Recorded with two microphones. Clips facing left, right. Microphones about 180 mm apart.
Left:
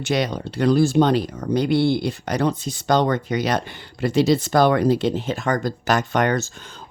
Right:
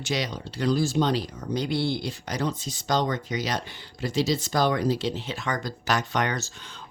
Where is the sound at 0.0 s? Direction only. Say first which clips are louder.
Left 7 dB; 60° left (ahead or behind).